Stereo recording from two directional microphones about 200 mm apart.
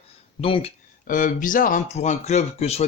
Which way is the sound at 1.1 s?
40° left (ahead or behind).